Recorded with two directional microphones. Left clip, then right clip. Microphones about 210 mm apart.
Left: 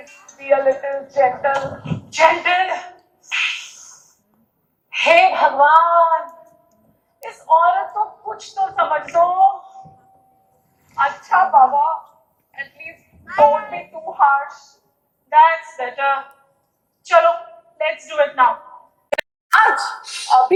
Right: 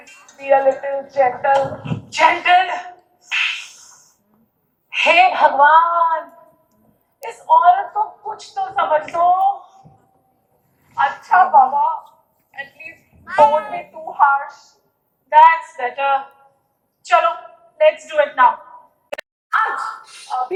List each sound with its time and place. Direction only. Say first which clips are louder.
0.0 s a sound: left 1 dB; 25° right (ahead or behind)
0.4 s a woman's voice: right 1 dB; 45° right (ahead or behind)
3.2 s insect: right 1 dB; 50° right (ahead or behind)
4.9 s a woman's voice: even; 50° right (ahead or behind)
7.3 s a woman's voice: right 2 dB; 50° right (ahead or behind)
10.8 s a woman's voice: right 1 dB; 50° right (ahead or behind)
19.1 s a sound: left 5 dB; centre (ahead or behind)